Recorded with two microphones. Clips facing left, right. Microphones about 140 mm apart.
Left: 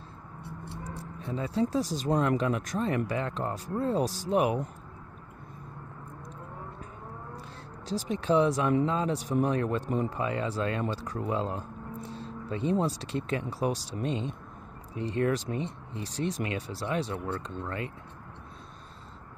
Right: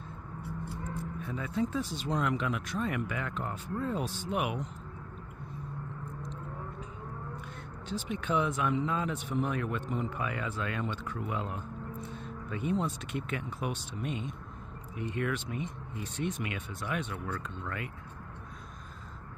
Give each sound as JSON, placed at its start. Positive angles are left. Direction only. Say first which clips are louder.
{"t": 0.4, "sound": "speech", "louder": "right 2 dB", "side_deg": 30}
{"t": 7.9, "sound": "speech", "louder": "left 6 dB", "side_deg": 35}